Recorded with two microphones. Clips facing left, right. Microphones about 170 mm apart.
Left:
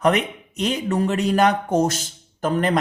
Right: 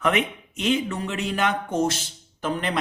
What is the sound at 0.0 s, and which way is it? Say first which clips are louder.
Speech: left 4 dB; 40° left (ahead or behind).